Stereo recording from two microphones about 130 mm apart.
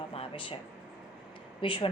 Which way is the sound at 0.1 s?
45° left (ahead or behind).